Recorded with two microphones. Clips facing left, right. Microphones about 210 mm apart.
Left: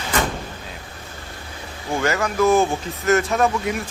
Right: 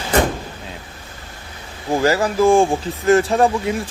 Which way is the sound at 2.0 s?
30° right (ahead or behind).